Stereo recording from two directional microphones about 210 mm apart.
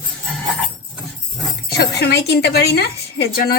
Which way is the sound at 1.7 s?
50° left (ahead or behind).